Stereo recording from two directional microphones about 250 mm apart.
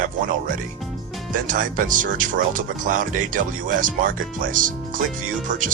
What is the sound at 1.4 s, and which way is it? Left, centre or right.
Speech, right.